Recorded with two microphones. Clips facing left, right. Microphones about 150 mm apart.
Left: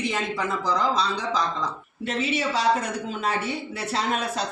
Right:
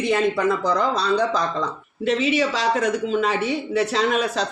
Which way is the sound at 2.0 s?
90° right.